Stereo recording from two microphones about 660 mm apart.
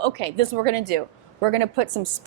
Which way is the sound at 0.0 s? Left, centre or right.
Right.